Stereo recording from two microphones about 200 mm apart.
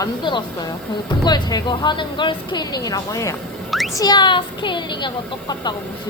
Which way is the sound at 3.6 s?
Centre (ahead or behind).